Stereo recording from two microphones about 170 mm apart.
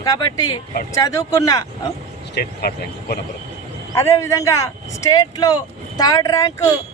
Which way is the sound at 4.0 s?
20° left (ahead or behind).